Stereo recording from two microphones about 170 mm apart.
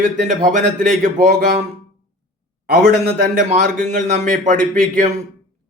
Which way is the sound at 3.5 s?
45° right (ahead or behind).